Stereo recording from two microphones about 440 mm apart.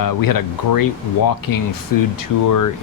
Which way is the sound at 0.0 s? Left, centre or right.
Left.